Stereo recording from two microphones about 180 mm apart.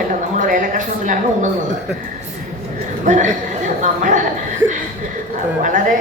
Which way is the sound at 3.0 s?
45° right (ahead or behind).